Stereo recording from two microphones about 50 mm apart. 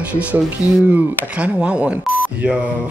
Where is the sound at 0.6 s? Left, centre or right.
Right.